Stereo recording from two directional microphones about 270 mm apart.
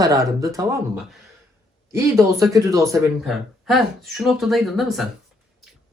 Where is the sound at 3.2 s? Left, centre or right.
Centre.